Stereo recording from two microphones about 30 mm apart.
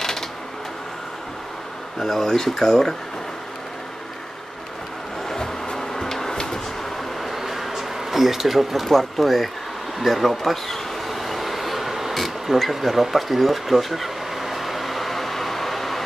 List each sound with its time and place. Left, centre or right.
2.0 s speech: centre
5.3 s vehicle: centre
7.3 s a sound: centre
8.8 s speech: centre
9.9 s bee: centre
13.0 s vehicle: centre